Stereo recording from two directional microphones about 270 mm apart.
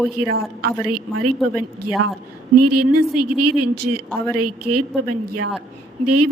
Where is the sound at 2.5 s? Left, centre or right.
Right.